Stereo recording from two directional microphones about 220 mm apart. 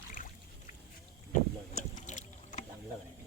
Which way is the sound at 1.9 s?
35° left (ahead or behind).